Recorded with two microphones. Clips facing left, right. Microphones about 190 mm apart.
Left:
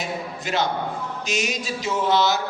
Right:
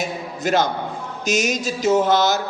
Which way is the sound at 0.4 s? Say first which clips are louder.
Right 5 dB; 45° right (ahead or behind).